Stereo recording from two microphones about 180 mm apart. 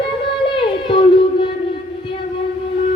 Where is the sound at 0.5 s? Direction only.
25° left (ahead or behind).